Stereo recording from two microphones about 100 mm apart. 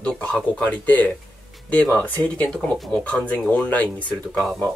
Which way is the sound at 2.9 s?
10° left (ahead or behind).